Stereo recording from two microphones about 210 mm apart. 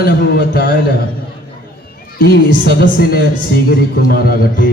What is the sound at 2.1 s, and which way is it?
A man's voice, 45° left (ahead or behind).